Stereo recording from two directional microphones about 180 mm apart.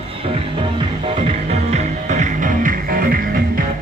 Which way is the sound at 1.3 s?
40° right (ahead or behind).